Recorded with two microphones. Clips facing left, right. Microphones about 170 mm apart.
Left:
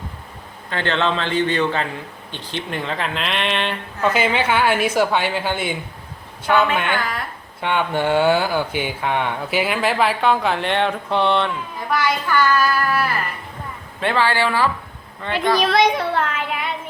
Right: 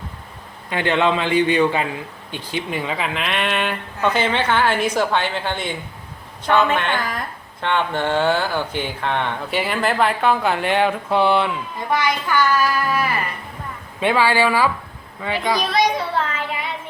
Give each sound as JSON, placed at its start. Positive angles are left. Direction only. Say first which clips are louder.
{"t": 0.7, "sound": "a child's voice", "louder": "right 2 dB", "side_deg": -15}
{"t": 4.1, "sound": "a woman's voice", "louder": "left 1 dB", "side_deg": 10}
{"t": 15.7, "sound": "child singing", "louder": "left 2 dB", "side_deg": 60}